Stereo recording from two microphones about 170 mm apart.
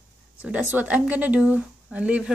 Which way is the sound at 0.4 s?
10° right (ahead or behind).